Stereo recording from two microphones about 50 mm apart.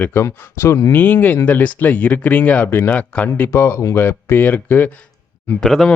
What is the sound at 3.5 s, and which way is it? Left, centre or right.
Speech, left.